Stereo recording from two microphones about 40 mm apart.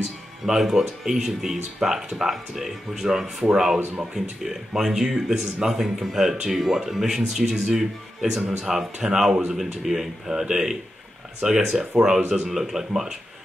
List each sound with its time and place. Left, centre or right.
0.6 s speech: centre